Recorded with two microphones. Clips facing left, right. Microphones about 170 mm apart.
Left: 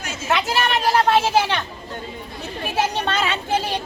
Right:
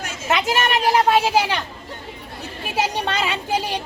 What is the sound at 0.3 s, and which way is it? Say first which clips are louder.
Speech: right 1 dB; 15° right (ahead or behind).